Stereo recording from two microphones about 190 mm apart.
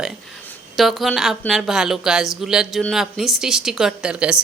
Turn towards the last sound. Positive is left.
turn(degrees=-5)  # may be behind; listen again after turning